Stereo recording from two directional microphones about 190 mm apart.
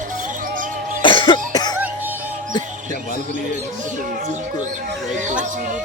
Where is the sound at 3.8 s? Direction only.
45° right (ahead or behind).